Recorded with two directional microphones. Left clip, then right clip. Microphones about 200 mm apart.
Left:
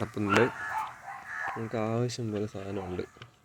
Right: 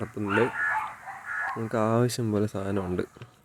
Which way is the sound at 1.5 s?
15° right (ahead or behind).